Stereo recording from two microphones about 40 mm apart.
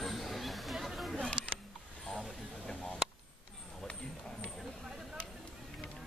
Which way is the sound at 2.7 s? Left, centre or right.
Left.